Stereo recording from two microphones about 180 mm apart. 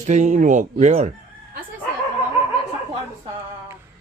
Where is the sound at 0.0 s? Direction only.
40° right (ahead or behind).